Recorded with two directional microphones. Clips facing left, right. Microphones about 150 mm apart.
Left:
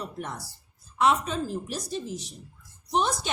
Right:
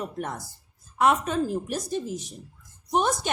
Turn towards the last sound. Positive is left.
turn(degrees=-50)  # may be behind; listen again after turning